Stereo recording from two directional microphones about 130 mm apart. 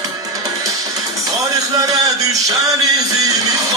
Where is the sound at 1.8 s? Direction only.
30° right (ahead or behind).